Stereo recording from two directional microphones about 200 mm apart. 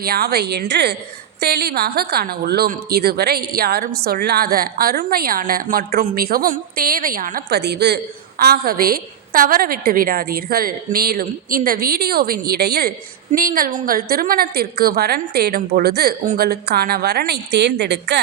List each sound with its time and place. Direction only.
0.0 s a woman's voice: 50° right (ahead or behind)